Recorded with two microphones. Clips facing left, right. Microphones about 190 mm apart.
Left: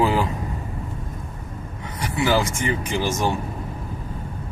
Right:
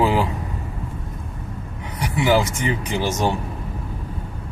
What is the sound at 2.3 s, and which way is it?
Speech, 15° right (ahead or behind).